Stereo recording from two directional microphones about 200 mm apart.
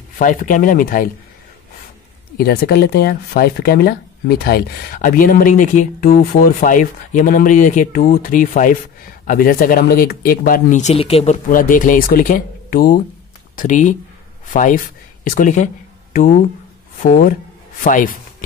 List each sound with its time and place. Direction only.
0.2 s speech: 40° left (ahead or behind)
2.3 s speech: 50° left (ahead or behind)